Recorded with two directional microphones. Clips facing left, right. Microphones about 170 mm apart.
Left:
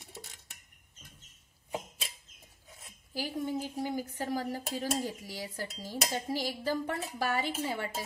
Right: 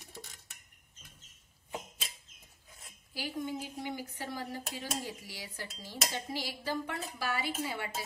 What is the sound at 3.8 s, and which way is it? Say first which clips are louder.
Speech: left 5 dB; 40° left (ahead or behind).